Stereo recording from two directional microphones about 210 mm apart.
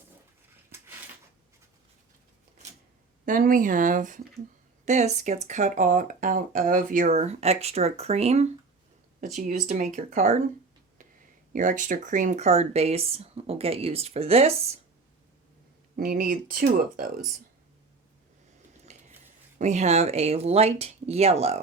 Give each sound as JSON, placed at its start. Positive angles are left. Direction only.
{"t": 3.2, "sound": "speech", "side_deg": -40}
{"t": 11.5, "sound": "speech", "side_deg": -40}
{"t": 16.0, "sound": "speech", "side_deg": -40}
{"t": 18.9, "sound": "a sound", "side_deg": -35}
{"t": 19.5, "sound": "speech", "side_deg": -35}